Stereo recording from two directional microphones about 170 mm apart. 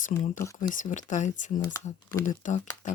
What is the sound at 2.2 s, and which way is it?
Speech, 45° left (ahead or behind).